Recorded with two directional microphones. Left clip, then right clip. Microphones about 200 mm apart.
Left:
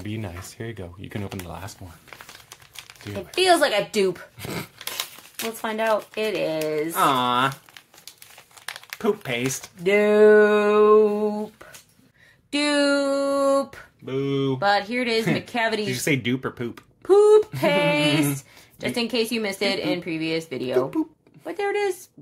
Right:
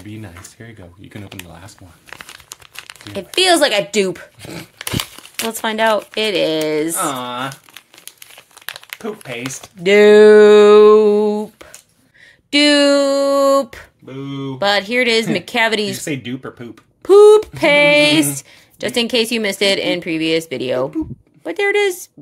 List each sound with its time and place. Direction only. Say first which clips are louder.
0.1 s speech: even; 30° left (ahead or behind)
3.2 s female singing: right 5 dB; 40° right (ahead or behind)
5.6 s a sound: right 7 dB; 50° right (ahead or behind)
7.0 s speech: left 2 dB; 35° left (ahead or behind)
8.6 s crumpling: right 5 dB; 15° right (ahead or behind)
9.0 s speech: left 3 dB; 35° left (ahead or behind)
9.8 s a sound: right 8 dB; 50° right (ahead or behind)
12.4 s female singing: right 9 dB; 40° right (ahead or behind)
14.2 s speech: left 3 dB; 40° left (ahead or behind)
14.6 s female singing: right 9 dB; 40° right (ahead or behind)
16.0 s speech: left 1 dB; 25° left (ahead or behind)
17.0 s female singing: right 8 dB; 40° right (ahead or behind)